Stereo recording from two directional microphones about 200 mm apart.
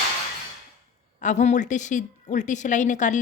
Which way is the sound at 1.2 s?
35° left (ahead or behind).